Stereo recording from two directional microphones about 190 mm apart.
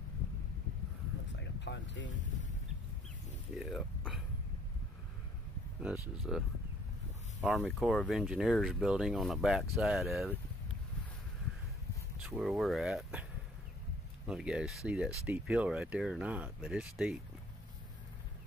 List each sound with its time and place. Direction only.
1.4 s boat: 70° left (ahead or behind)
3.5 s speech: centre (ahead or behind)
5.8 s speech: 5° right (ahead or behind)
7.8 s speech: centre (ahead or behind)
12.3 s speech: centre (ahead or behind)
14.2 s speech: 5° right (ahead or behind)